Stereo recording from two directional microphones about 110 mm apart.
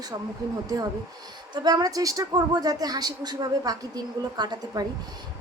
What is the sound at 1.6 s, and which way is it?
A woman's voice, 35° right (ahead or behind).